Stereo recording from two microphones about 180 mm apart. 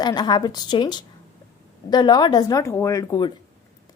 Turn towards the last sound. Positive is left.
turn(degrees=20)  # may be behind; listen again after turning